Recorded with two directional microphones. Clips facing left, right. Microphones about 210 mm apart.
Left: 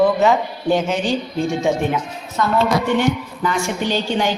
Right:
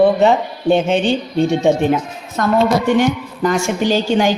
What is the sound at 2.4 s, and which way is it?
A woman's voice, 50° right (ahead or behind).